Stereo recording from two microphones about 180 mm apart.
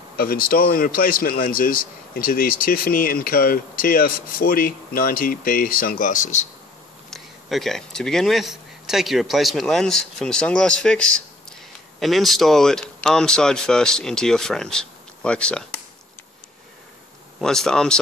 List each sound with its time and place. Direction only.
0.2 s speech: 55° left (ahead or behind)
7.1 s speech: centre (ahead or behind)
17.4 s speech: 5° left (ahead or behind)